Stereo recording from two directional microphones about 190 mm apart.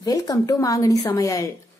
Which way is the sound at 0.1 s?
20° left (ahead or behind).